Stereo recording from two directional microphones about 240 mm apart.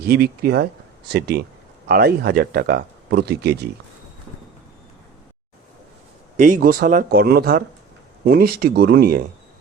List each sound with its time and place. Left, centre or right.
0.0 s speech: right
6.3 s speech: right